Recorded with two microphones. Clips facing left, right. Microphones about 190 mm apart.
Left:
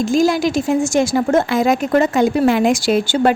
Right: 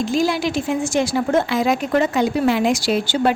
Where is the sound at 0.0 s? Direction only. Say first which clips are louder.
Left 4 dB; 45° left (ahead or behind).